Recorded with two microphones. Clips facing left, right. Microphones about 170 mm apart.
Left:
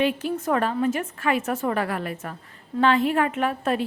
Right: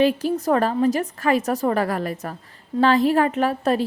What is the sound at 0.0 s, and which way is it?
A woman's voice, 35° right (ahead or behind).